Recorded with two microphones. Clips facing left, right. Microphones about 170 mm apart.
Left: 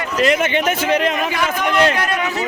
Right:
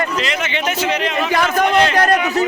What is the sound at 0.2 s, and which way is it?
Speech, 50° left (ahead or behind).